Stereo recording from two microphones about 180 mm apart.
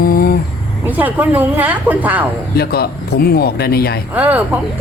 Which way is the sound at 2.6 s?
60° left (ahead or behind).